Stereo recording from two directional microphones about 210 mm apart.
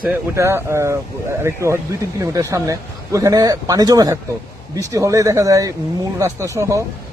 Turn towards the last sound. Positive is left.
turn(degrees=-15)  # may be behind; listen again after turning